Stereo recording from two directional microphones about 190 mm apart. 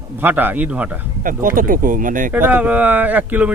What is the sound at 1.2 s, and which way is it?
Speech, 45° right (ahead or behind).